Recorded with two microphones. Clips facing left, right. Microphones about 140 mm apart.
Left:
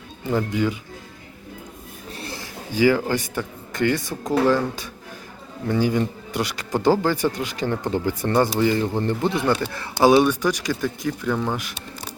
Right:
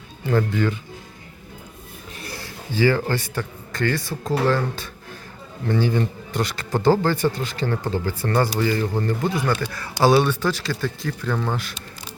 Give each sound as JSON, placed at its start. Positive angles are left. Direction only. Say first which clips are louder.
{"t": 0.3, "sound": "speech", "louder": "right 1 dB", "side_deg": 10}
{"t": 2.1, "sound": "a man's voice", "louder": "left 1 dB", "side_deg": 25}